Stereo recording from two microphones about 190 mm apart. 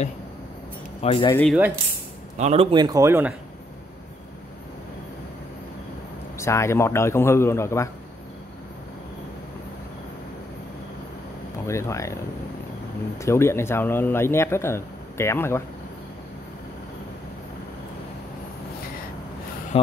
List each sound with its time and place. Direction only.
1.0 s speech: 30° left (ahead or behind)
1.3 s speech: 5° left (ahead or behind)
2.3 s a man's voice: 35° right (ahead or behind); by 3.3 s 10° right (ahead or behind)
6.3 s speech: 15° left (ahead or behind)
11.6 s speech: 15° left (ahead or behind)
13.2 s speech: 15° left (ahead or behind)
19.7 s speech: 30° left (ahead or behind)